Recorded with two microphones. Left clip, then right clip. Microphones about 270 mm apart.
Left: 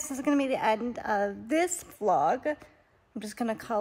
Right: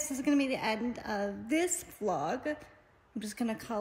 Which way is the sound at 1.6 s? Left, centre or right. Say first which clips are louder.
Left 4 dB; centre.